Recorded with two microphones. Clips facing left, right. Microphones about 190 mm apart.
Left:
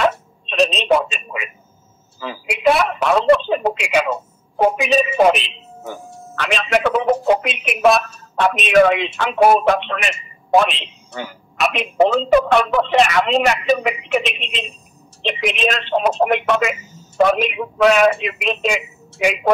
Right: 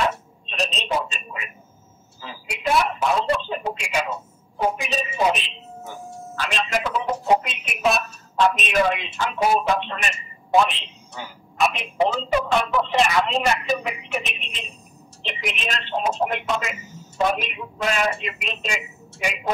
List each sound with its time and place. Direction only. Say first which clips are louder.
0.0 s telephone: left 6 dB; 75° left (ahead or behind)
2.1 s speech: left 9 dB; 75° left (ahead or behind)